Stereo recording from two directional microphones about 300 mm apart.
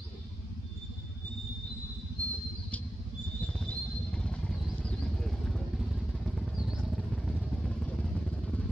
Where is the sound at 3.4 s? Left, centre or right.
Centre.